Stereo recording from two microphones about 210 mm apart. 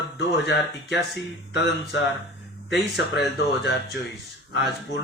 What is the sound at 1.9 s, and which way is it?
Speech, 55° left (ahead or behind).